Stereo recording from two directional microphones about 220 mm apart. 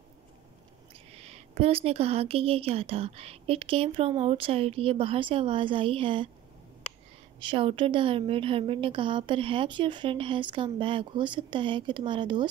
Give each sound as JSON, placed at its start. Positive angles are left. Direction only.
{"t": 1.1, "sound": "a woman's voice", "side_deg": -30}
{"t": 7.4, "sound": "a woman's voice", "side_deg": -25}